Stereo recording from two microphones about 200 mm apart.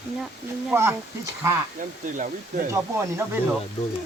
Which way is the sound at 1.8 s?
40° right (ahead or behind).